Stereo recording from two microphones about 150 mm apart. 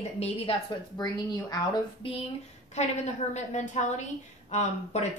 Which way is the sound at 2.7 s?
50° left (ahead or behind).